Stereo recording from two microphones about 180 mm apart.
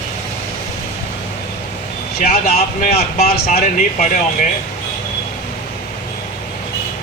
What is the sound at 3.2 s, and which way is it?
Speech, 60° left (ahead or behind).